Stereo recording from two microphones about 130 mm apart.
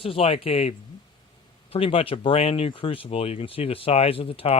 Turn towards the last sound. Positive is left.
turn(degrees=45)  # may be behind; listen again after turning